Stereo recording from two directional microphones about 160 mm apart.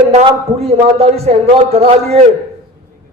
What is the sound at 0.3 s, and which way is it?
A man's voice, 40° right (ahead or behind).